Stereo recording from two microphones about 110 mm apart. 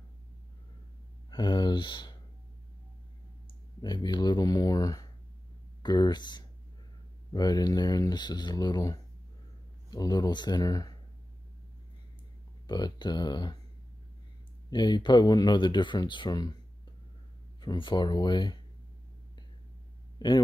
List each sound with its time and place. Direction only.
1.3 s speech: 45° left (ahead or behind)
3.8 s speech: 40° left (ahead or behind)
12.6 s speech: 40° left (ahead or behind)
14.7 s speech: 40° left (ahead or behind)
17.6 s speech: 45° left (ahead or behind)
20.2 s speech: 40° left (ahead or behind)